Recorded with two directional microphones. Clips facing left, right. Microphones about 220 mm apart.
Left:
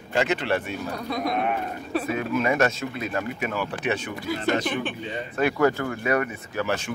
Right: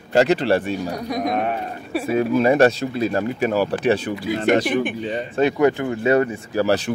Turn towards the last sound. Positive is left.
turn(degrees=-35)  # may be behind; listen again after turning